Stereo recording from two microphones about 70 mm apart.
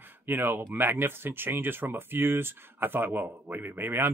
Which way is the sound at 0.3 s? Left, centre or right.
Right.